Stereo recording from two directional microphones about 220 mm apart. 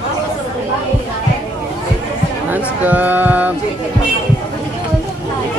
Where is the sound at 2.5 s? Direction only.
5° right (ahead or behind).